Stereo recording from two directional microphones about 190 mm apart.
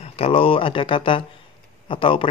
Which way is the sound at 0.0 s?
30° left (ahead or behind).